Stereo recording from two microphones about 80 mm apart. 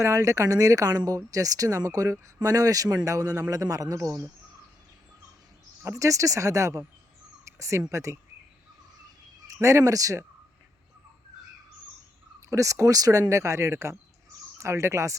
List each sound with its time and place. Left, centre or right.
0.0 s speech: right
6.0 s speech: right
9.5 s speech: right
12.5 s speech: right